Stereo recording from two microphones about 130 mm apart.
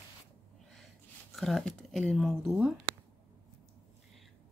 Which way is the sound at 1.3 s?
Centre (ahead or behind).